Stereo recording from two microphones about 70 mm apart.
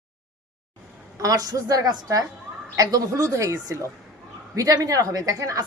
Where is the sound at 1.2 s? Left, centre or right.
Right.